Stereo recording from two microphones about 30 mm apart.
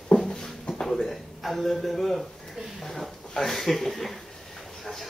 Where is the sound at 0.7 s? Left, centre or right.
Centre.